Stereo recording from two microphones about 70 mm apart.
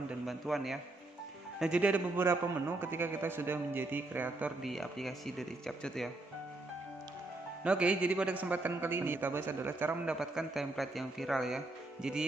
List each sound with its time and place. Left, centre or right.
0.3 s speech: centre
1.6 s a man's voice: centre
2.1 s a man's voice: right
4.6 s speech: centre
7.6 s a man's voice: centre
10.0 s speech: centre